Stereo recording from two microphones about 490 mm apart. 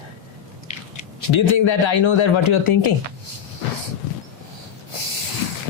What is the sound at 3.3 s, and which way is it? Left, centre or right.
Vehicle, left.